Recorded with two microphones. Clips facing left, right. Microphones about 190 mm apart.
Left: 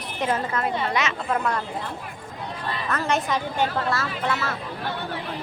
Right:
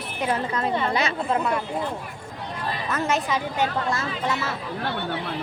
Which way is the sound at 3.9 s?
15° right (ahead or behind).